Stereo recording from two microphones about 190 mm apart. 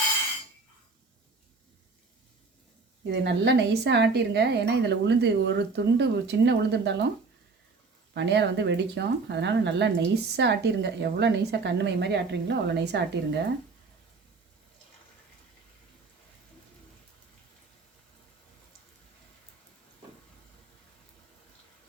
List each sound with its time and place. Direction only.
3.1 s a woman's voice: 65° right (ahead or behind)
8.1 s a woman's voice: 65° right (ahead or behind)